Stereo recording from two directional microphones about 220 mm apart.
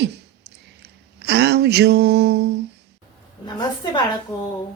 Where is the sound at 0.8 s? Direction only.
50° right (ahead or behind).